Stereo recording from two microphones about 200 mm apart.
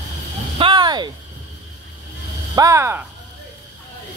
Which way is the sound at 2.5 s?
15° right (ahead or behind).